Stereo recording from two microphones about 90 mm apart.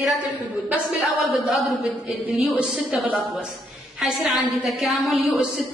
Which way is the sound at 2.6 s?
15° right (ahead or behind).